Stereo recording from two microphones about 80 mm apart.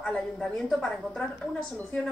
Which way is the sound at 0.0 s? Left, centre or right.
Centre.